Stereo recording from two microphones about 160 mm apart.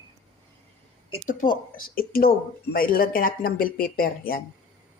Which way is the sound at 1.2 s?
60° left (ahead or behind).